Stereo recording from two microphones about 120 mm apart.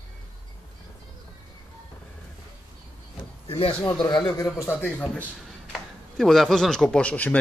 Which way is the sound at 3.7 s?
10° left (ahead or behind).